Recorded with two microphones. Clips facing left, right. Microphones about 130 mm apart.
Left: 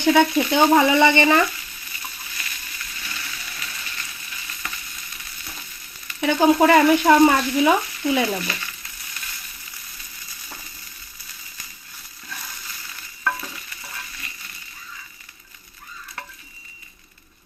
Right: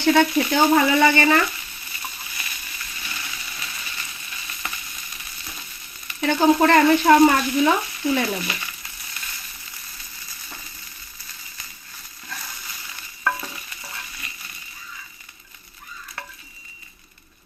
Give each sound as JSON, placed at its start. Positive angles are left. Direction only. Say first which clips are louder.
{"t": 0.0, "sound": "speech", "louder": "left 1 dB", "side_deg": 15}
{"t": 4.6, "sound": "frying", "louder": "right 1 dB", "side_deg": -20}
{"t": 6.1, "sound": "frying", "louder": "left 1 dB", "side_deg": 15}